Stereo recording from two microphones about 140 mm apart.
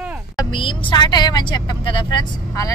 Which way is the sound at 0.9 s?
30° left (ahead or behind).